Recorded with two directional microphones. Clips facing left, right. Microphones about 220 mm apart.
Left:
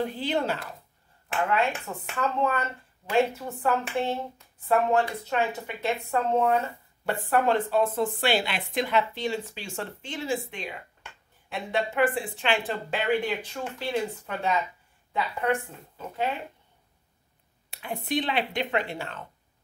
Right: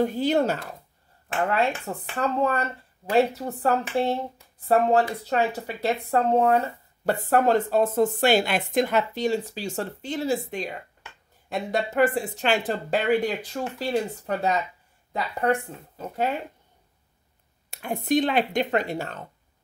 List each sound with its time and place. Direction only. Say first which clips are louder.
0.0 s speech: right 6 dB; 45° right (ahead or behind)
17.6 s speech: right 6 dB; 45° right (ahead or behind)